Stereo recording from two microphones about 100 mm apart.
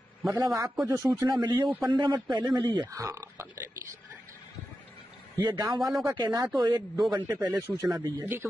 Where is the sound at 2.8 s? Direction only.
35° right (ahead or behind).